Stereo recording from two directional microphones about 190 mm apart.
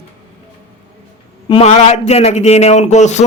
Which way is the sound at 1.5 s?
35° left (ahead or behind).